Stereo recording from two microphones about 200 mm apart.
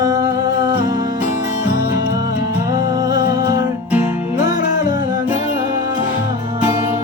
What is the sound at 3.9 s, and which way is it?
Music, 10° right (ahead or behind).